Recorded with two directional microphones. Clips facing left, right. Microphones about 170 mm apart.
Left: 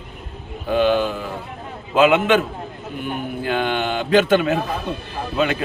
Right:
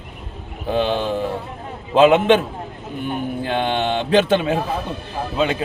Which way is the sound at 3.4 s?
25° right (ahead or behind).